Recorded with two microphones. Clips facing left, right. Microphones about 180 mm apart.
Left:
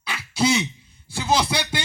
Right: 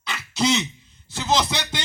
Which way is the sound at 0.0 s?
10° left (ahead or behind).